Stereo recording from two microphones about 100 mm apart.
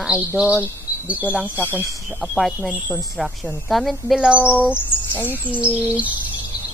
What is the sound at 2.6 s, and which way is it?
Bird vocalization, 15° right (ahead or behind).